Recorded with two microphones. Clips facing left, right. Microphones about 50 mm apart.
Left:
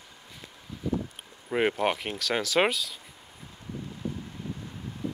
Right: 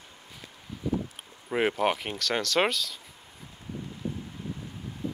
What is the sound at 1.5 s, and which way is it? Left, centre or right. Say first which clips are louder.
Speech: even; centre.